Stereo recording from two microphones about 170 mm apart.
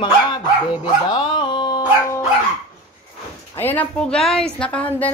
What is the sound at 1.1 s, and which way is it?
Dog, 30° left (ahead or behind).